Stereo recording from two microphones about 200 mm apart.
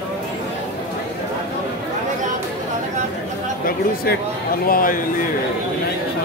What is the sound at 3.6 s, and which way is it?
Speech, 50° left (ahead or behind).